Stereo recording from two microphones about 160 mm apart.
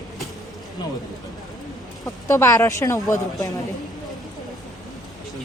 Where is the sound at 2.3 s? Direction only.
20° left (ahead or behind).